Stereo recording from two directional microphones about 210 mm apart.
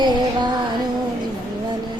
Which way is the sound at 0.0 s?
20° right (ahead or behind).